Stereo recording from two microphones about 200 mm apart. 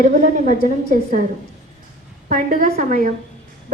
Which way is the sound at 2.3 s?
45° right (ahead or behind).